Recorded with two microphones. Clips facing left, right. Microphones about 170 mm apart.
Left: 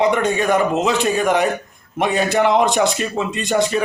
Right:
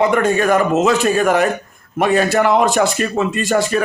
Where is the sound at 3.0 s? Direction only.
65° right (ahead or behind).